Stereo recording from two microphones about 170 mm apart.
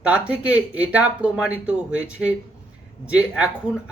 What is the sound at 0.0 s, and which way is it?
Speech, 5° right (ahead or behind).